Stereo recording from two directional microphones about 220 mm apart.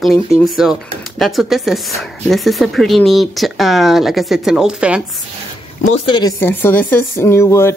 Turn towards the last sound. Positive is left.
turn(degrees=10)  # may be behind; listen again after turning